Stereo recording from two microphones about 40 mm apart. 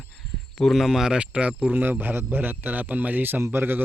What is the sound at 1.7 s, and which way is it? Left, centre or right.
A man's voice, right.